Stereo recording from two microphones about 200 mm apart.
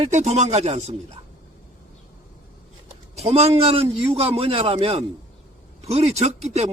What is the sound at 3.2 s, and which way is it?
A man's voice, 30° right (ahead or behind).